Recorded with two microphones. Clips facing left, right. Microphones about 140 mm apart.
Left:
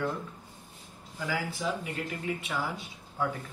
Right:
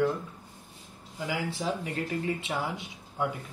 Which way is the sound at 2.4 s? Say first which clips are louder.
Right 1 dB; 20° right (ahead or behind).